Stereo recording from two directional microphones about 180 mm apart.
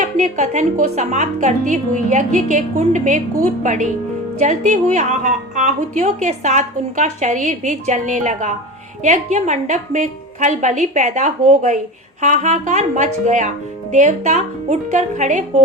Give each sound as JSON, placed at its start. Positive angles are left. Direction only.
{"t": 0.0, "sound": "a woman's voice", "side_deg": -40}